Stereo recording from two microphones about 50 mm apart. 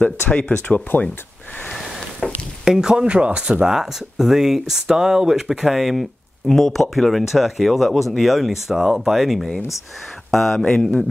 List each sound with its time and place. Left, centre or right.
0.0 s speech: left
2.6 s speech: centre
10.6 s mantra: centre